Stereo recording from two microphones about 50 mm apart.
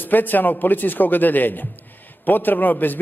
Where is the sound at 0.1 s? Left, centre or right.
Left.